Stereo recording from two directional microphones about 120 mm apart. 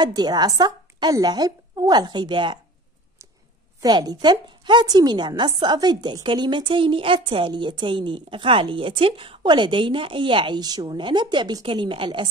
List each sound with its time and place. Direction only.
0.0 s a woman's voice: 35° right (ahead or behind)
3.8 s a woman's voice: 35° right (ahead or behind)